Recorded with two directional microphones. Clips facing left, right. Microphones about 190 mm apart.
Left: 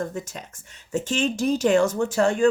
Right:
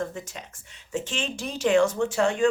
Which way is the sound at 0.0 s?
45° left (ahead or behind).